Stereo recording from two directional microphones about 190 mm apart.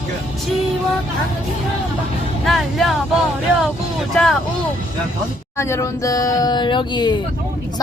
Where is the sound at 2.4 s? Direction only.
Centre (ahead or behind).